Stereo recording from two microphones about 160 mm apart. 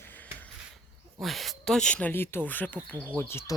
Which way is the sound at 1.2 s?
Centre (ahead or behind).